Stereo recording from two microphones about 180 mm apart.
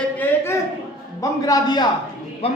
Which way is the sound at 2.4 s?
35° left (ahead or behind).